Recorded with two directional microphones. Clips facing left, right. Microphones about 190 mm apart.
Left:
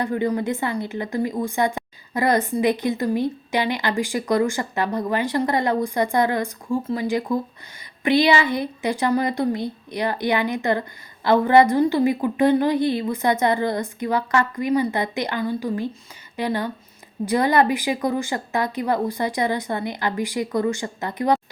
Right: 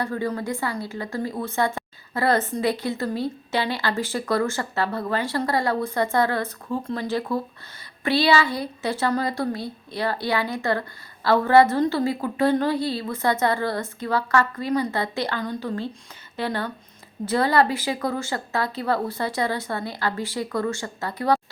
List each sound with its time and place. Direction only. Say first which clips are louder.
0.0 s speech: left 4 dB; 20° left (ahead or behind)